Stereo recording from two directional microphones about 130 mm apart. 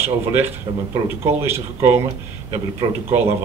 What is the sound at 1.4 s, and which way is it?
Speech, 20° right (ahead or behind).